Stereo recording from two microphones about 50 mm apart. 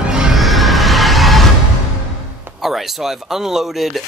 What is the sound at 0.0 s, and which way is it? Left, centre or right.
Neigh, centre.